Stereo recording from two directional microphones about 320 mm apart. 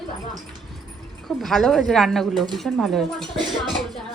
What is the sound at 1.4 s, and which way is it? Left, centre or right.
Speech, centre.